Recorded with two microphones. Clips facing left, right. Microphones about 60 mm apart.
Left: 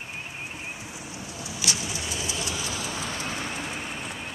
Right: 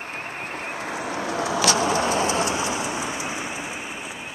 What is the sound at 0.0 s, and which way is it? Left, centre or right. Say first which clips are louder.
Vehicle: right 5 dB; right.